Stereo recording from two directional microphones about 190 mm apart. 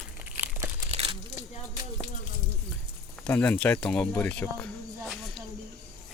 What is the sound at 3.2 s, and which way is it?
Speech, 10° left (ahead or behind).